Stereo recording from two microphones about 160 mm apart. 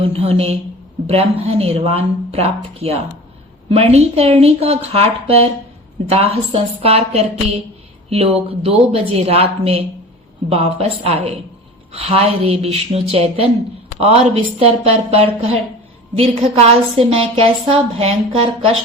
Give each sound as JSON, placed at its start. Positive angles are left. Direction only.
{"t": 0.1, "sound": "a woman's voice", "side_deg": -35}